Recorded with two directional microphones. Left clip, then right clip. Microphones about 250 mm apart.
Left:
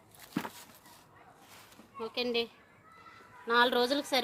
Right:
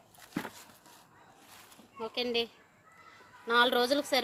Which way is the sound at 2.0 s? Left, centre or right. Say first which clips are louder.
Even; centre.